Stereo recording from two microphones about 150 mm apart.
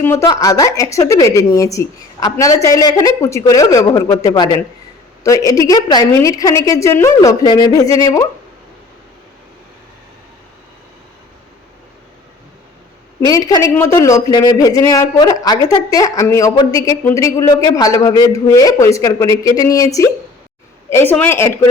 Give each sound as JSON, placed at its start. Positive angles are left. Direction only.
{"t": 0.0, "sound": "a woman's voice", "side_deg": 15}
{"t": 13.2, "sound": "a man's voice", "side_deg": 25}